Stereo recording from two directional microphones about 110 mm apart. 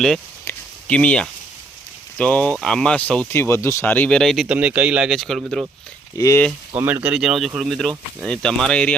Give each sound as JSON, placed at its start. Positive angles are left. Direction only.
{"t": 0.9, "sound": "speech", "side_deg": 10}
{"t": 3.3, "sound": "speech", "side_deg": 25}
{"t": 4.4, "sound": "speech", "side_deg": -15}
{"t": 5.1, "sound": "speech", "side_deg": 5}
{"t": 6.1, "sound": "speech", "side_deg": 30}
{"t": 6.7, "sound": "speech", "side_deg": -20}
{"t": 7.1, "sound": "speech", "side_deg": -5}